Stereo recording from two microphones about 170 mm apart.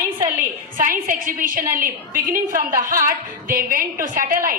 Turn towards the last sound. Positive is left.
turn(degrees=-55)  # may be behind; listen again after turning